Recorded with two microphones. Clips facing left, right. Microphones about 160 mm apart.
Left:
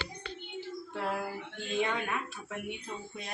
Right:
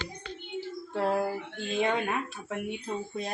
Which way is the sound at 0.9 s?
35° right (ahead or behind).